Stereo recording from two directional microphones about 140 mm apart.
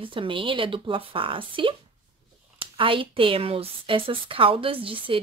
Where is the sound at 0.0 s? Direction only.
40° right (ahead or behind).